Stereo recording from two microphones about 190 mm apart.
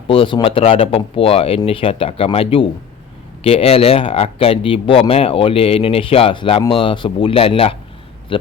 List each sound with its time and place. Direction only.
0.1 s speech: 25° left (ahead or behind)